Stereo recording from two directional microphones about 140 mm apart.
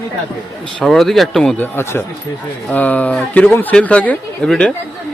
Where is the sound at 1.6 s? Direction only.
15° left (ahead or behind).